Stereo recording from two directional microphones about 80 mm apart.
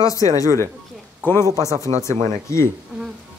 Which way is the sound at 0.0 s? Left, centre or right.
Left.